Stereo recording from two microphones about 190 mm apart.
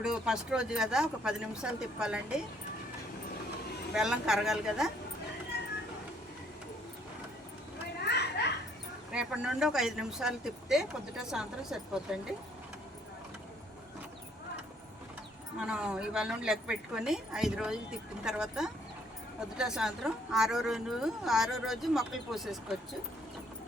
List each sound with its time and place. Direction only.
0.0 s a woman's voice: 5° right (ahead or behind)
3.9 s a woman's voice: 5° right (ahead or behind)
5.5 s cat: 60° left (ahead or behind)
8.0 s children playing: 60° left (ahead or behind)
9.1 s a woman's voice: 5° right (ahead or behind)
15.5 s a woman's voice: 5° right (ahead or behind)